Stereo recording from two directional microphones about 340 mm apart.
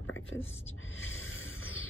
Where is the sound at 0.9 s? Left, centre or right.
Left.